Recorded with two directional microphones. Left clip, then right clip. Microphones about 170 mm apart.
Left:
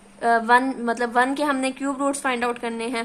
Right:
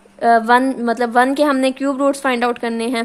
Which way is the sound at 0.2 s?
40° right (ahead or behind).